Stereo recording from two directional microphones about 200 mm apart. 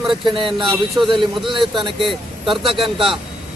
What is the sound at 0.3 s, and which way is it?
Speech, 25° right (ahead or behind).